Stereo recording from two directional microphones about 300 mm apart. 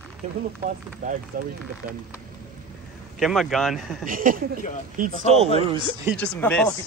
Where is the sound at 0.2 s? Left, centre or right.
Right.